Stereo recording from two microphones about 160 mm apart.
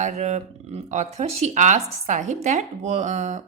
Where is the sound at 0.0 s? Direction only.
45° right (ahead or behind).